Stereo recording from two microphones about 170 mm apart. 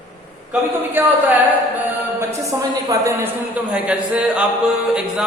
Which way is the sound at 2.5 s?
15° right (ahead or behind).